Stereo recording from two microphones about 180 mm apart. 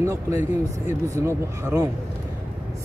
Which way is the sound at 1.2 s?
15° right (ahead or behind).